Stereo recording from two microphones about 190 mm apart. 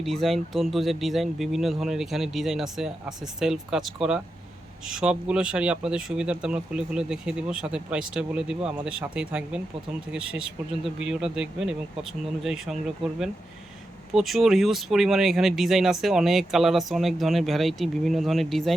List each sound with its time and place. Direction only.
0.0 s speech: centre (ahead or behind)
14.1 s speech: centre (ahead or behind)